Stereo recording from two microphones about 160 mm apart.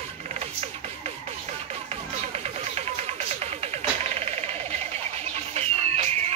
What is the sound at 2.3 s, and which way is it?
Music, 40° right (ahead or behind).